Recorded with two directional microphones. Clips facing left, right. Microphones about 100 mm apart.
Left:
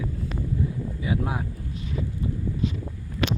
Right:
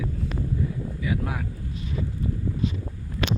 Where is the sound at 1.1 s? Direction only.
25° left (ahead or behind).